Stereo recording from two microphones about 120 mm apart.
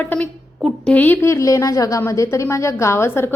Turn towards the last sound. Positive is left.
turn(degrees=20)  # may be behind; listen again after turning